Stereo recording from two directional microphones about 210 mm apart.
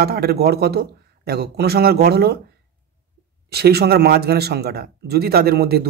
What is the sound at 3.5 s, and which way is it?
A man's voice, 50° right (ahead or behind).